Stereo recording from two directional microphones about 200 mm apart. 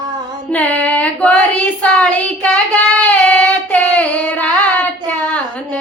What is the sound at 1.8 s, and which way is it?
Child singing, 5° left (ahead or behind).